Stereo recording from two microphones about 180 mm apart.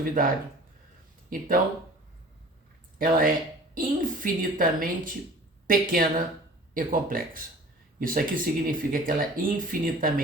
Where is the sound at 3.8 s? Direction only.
50° right (ahead or behind).